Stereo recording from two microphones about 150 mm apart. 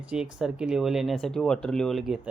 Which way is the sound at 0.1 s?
5° right (ahead or behind).